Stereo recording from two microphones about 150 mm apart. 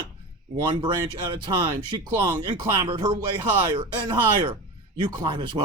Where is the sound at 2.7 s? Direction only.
25° right (ahead or behind).